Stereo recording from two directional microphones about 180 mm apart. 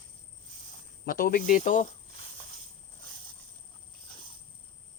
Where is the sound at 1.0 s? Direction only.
55° left (ahead or behind).